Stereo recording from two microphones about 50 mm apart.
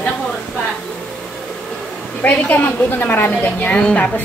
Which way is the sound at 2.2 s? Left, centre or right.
Left.